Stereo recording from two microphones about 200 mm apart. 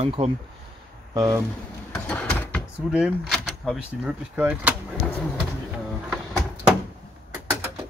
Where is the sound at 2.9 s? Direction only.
Centre (ahead or behind).